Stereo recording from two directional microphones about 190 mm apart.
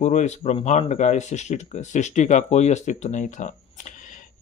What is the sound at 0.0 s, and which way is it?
Speech, 40° left (ahead or behind).